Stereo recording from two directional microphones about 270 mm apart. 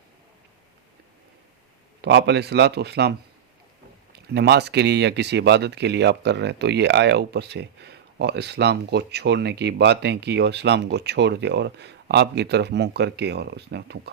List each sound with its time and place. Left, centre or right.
2.0 s speech: right